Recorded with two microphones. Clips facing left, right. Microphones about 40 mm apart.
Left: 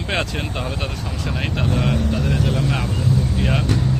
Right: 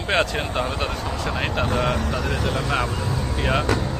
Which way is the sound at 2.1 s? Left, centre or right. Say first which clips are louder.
Left 3 dB; right.